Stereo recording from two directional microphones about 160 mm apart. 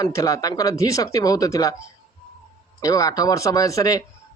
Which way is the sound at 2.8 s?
20° left (ahead or behind).